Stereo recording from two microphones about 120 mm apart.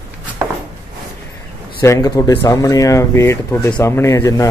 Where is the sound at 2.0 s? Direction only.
30° left (ahead or behind).